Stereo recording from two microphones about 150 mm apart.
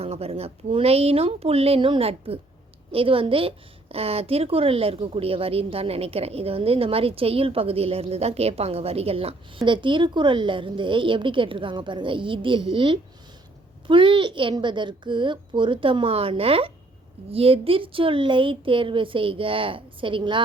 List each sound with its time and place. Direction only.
0.0 s a woman's voice: 40° right (ahead or behind)